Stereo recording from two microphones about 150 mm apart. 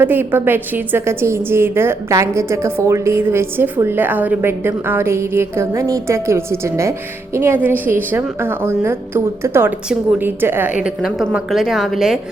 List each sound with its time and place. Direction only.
0.0 s a woman's voice: 15° right (ahead or behind)